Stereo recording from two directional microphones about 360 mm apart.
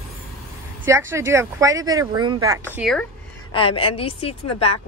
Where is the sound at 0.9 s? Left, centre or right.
Centre.